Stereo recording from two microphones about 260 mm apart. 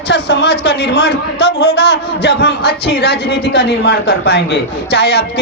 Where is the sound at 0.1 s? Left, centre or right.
Left.